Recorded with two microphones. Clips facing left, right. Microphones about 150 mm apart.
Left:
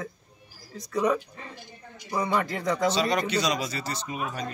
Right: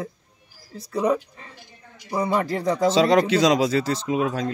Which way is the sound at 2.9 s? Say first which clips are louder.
Right 8 dB; 90° right.